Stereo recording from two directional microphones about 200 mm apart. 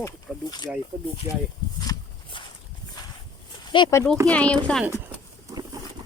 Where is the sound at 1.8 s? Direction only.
20° left (ahead or behind).